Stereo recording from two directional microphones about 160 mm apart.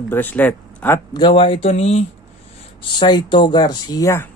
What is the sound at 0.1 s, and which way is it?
Speech, 10° left (ahead or behind).